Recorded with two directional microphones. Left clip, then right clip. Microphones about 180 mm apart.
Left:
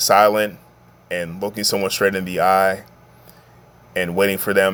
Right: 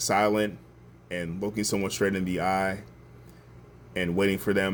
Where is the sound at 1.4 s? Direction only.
45° left (ahead or behind).